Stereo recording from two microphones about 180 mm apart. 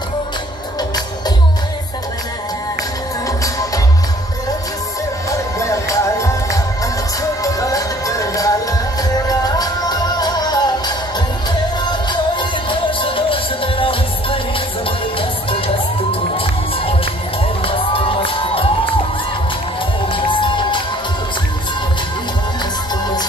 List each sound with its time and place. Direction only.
3.3 s music: 20° left (ahead or behind)
5.3 s music: 15° left (ahead or behind)
20.2 s music: 25° left (ahead or behind)